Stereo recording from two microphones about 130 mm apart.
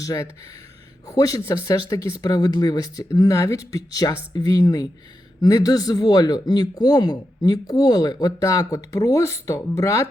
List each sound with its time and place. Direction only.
0.0 s a man's voice: 25° left (ahead or behind)